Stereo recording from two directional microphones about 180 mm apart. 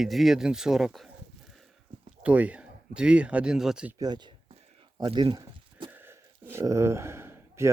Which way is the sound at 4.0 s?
25° right (ahead or behind).